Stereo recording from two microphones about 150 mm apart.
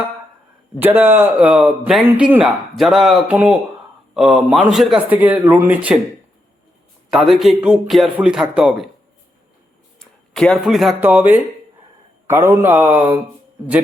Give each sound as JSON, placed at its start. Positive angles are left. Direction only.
{"t": 0.8, "sound": "speech", "side_deg": -10}
{"t": 7.1, "sound": "speech", "side_deg": 0}
{"t": 10.0, "sound": "a sound", "side_deg": 5}
{"t": 11.0, "sound": "speech", "side_deg": -10}